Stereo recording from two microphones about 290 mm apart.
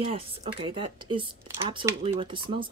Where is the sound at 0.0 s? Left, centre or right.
Centre.